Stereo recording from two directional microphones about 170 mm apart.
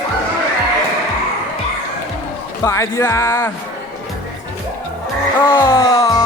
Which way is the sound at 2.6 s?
15° left (ahead or behind).